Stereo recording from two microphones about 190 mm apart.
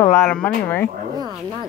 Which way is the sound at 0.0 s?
15° left (ahead or behind).